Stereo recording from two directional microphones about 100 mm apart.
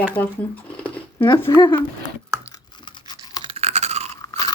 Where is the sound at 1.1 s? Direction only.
45° left (ahead or behind).